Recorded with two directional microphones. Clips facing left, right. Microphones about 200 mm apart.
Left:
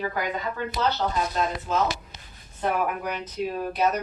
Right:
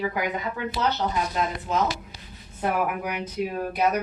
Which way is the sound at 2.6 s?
10° right (ahead or behind).